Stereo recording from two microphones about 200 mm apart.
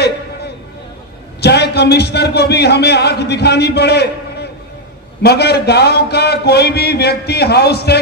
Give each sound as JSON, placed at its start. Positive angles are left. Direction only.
{"t": 1.4, "sound": "a man's voice", "side_deg": 55}